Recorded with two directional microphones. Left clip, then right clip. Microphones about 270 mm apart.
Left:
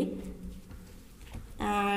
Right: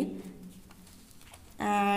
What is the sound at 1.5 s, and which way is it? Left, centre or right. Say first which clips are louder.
Speech: right 2 dB; right.